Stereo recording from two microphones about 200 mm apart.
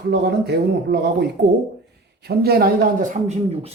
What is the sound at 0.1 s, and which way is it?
Speech, 55° right (ahead or behind).